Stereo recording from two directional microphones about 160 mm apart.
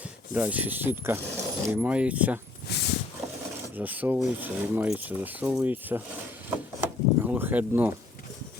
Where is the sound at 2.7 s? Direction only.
90° left.